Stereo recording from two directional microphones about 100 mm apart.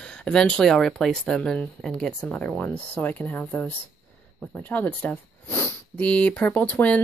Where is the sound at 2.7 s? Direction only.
15° left (ahead or behind).